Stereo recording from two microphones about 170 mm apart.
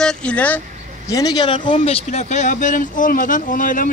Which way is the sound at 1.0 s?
20° left (ahead or behind).